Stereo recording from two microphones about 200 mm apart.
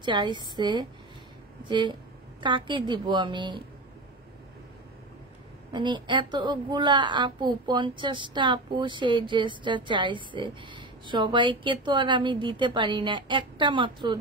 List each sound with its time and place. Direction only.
0.0 s a woman's voice: 20° right (ahead or behind)
5.7 s a woman's voice: 20° right (ahead or behind)